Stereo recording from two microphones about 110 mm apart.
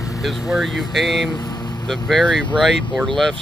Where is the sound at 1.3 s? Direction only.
40° left (ahead or behind).